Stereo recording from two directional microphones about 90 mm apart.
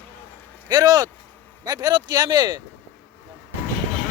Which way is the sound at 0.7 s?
45° right (ahead or behind).